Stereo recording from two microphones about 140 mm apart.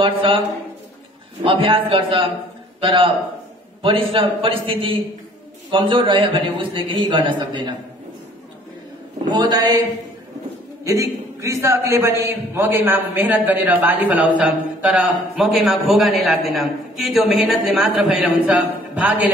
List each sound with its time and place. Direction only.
0.0 s a man's voice: 40° right (ahead or behind)
1.4 s a man's voice: 35° right (ahead or behind)
9.3 s a man's voice: 30° right (ahead or behind)
10.8 s a man's voice: 20° right (ahead or behind)